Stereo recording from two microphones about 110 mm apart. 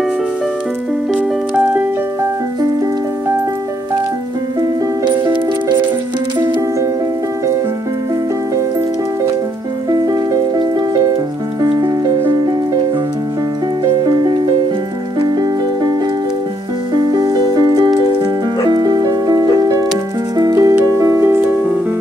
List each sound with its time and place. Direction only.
1.6 s music: 15° right (ahead or behind)
5.2 s music: 45° right (ahead or behind)
9.8 s music: 35° right (ahead or behind)
13.8 s music: 40° right (ahead or behind)
16.9 s music: 35° right (ahead or behind); by 21.5 s 20° right (ahead or behind)